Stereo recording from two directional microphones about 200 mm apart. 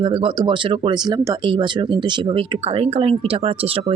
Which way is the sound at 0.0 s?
25° right (ahead or behind).